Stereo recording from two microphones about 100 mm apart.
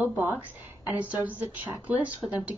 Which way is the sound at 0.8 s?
15° right (ahead or behind).